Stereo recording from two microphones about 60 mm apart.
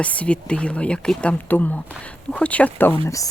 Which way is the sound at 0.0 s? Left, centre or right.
Left.